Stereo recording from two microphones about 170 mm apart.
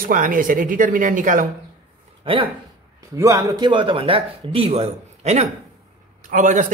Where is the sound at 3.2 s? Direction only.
20° right (ahead or behind).